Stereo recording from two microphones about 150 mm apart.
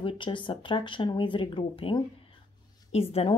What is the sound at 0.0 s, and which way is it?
Speech, 35° left (ahead or behind).